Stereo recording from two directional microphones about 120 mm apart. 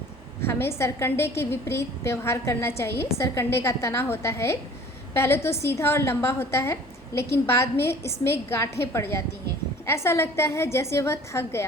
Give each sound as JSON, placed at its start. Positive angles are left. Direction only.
{"t": 0.4, "sound": "a woman's voice", "side_deg": 20}